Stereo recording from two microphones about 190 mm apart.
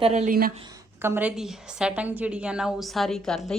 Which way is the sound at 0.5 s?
25° right (ahead or behind).